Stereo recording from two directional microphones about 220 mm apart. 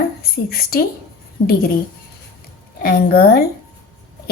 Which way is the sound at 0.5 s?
45° left (ahead or behind).